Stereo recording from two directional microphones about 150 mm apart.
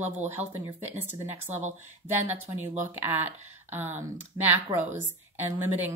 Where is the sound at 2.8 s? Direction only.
10° right (ahead or behind).